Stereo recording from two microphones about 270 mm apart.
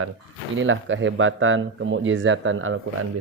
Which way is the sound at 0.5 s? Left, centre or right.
Right.